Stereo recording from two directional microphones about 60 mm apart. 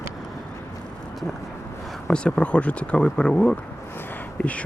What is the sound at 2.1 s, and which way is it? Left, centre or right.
Speech, centre.